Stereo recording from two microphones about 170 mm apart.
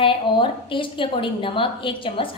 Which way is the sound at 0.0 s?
30° left (ahead or behind).